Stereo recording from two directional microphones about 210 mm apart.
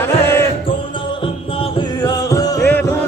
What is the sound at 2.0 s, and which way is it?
Music, 15° left (ahead or behind).